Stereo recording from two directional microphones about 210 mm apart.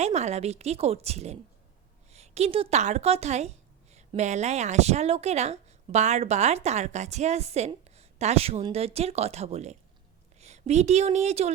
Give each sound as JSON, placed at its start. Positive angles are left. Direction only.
{"t": 0.0, "sound": "speech", "side_deg": -30}